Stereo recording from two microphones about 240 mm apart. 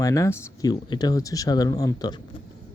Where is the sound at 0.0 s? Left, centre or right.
Centre.